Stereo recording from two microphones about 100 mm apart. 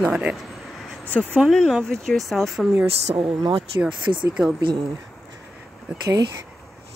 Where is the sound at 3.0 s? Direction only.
80° right.